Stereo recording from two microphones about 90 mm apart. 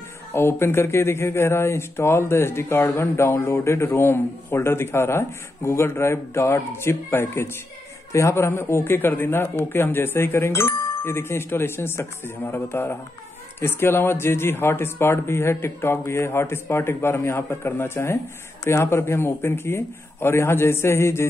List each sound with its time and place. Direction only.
0.3 s speech: 25° left (ahead or behind)